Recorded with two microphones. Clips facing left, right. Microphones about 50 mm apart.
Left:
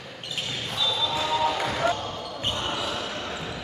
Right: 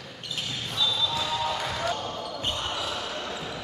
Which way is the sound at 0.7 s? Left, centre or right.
Centre.